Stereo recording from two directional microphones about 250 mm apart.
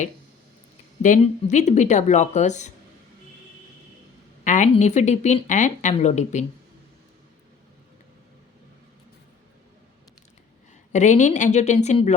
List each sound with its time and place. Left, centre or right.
1.0 s speech: left
4.4 s speech: left
10.9 s speech: left